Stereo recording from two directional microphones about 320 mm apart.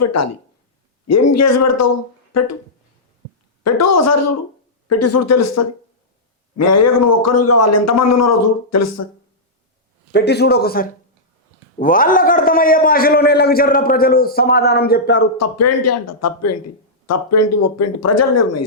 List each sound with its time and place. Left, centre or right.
0.0 s a man's voice: left
3.6 s a man's voice: left
10.1 s a man's voice: left
15.4 s a man's voice: left